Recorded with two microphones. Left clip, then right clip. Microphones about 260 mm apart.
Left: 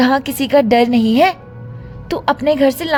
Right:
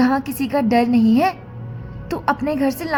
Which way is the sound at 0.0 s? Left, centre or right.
Left.